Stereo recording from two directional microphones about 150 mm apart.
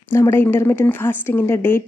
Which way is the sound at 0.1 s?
15° left (ahead or behind).